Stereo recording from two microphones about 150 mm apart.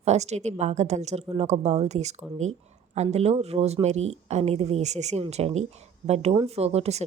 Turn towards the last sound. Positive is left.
turn(degrees=-45)  # may be behind; listen again after turning